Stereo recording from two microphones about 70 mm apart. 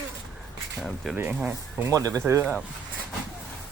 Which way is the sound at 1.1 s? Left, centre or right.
Centre.